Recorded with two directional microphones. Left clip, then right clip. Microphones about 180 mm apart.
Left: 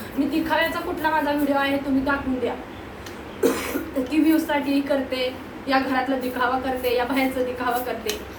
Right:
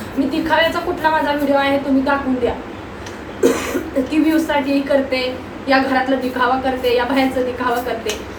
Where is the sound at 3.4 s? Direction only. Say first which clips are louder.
Right 6 dB; 5° left (ahead or behind).